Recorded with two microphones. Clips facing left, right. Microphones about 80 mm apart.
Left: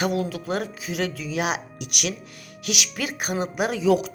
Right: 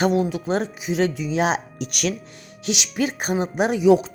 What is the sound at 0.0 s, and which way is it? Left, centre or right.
Speech, right.